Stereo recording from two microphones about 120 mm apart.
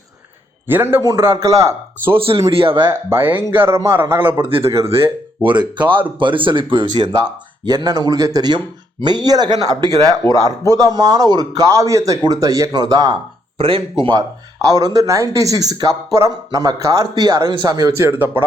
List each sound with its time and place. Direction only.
0.7 s a man's voice: 15° right (ahead or behind)
1.0 s speech: 30° right (ahead or behind)
2.1 s speech: 50° right (ahead or behind)
3.1 s speech: 15° right (ahead or behind)
5.4 s speech: 40° right (ahead or behind)
13.6 s speech: 50° right (ahead or behind)
14.1 s speech: 30° right (ahead or behind)